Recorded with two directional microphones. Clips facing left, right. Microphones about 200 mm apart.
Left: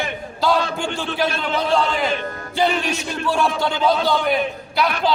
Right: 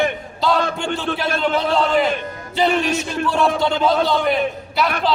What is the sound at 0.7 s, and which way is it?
A man's voice, centre (ahead or behind).